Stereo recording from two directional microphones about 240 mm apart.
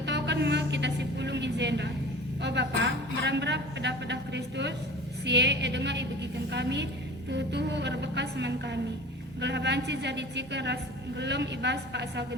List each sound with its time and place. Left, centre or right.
0.0 s music: right
2.4 s a woman's voice: right